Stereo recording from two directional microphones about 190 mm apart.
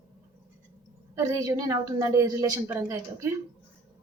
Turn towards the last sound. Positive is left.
turn(degrees=-15)  # may be behind; listen again after turning